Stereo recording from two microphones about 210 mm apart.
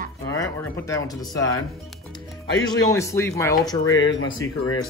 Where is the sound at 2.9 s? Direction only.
15° left (ahead or behind).